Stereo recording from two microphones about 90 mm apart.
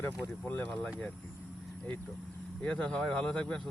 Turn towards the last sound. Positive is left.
turn(degrees=10)  # may be behind; listen again after turning